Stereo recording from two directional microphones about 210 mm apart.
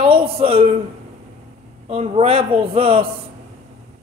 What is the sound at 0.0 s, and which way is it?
Speech, 25° right (ahead or behind).